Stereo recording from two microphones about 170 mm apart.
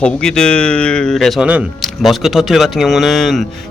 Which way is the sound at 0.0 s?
5° left (ahead or behind).